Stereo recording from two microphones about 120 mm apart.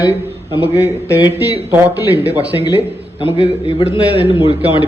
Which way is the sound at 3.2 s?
45° left (ahead or behind).